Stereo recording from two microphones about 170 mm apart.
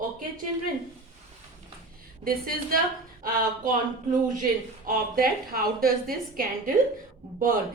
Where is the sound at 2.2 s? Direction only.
60° right (ahead or behind).